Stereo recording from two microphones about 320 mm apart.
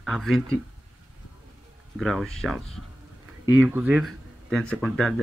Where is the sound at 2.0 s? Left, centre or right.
Centre.